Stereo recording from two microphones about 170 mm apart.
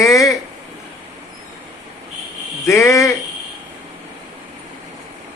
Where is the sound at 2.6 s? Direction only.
15° left (ahead or behind).